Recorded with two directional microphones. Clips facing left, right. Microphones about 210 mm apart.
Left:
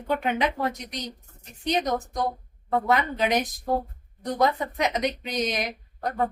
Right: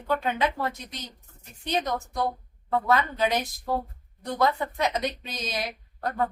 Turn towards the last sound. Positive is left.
turn(degrees=20)  # may be behind; listen again after turning